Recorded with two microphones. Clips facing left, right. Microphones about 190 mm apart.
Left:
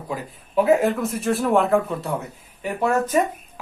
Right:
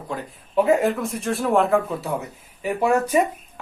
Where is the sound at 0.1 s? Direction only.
5° left (ahead or behind).